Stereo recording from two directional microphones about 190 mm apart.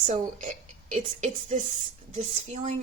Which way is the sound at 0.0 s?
40° right (ahead or behind).